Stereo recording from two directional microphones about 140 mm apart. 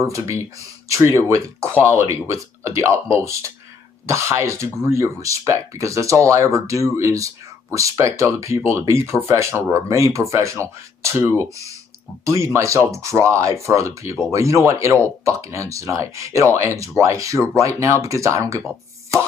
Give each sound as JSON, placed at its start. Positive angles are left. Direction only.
{"t": 0.0, "sound": "speech", "side_deg": -20}